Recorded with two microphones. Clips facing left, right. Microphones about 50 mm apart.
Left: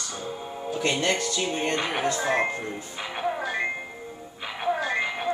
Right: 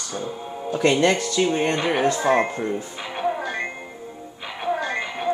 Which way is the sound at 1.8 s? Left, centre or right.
Centre.